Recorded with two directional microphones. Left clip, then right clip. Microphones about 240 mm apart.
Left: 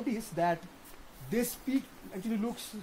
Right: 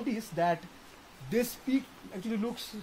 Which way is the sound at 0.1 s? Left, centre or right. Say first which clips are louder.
Right 1 dB; right.